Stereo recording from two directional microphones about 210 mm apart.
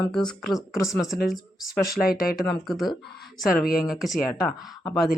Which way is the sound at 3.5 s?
45° left (ahead or behind).